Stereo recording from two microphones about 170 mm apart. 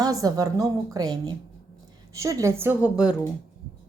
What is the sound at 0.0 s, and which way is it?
A woman's voice, 20° right (ahead or behind).